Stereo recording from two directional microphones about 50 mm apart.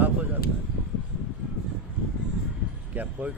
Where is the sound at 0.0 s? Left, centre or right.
Right.